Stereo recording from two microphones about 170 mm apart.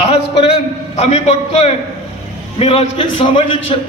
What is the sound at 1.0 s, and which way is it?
A man's voice, 40° left (ahead or behind).